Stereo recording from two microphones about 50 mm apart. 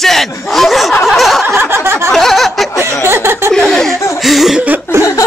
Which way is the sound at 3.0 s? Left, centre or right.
Right.